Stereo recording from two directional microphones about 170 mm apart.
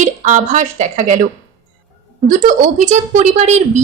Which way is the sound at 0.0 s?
45° right (ahead or behind).